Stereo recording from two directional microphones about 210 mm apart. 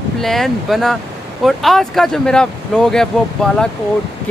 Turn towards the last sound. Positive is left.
turn(degrees=5)  # may be behind; listen again after turning